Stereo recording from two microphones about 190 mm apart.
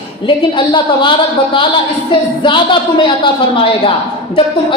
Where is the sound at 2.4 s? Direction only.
25° left (ahead or behind).